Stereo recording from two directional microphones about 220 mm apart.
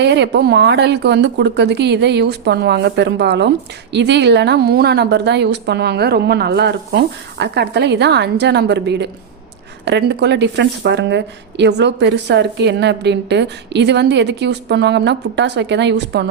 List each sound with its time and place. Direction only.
0.0 s speech: 50° right (ahead or behind)